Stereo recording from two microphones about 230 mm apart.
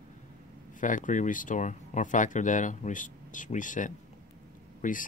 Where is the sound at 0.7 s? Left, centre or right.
Left.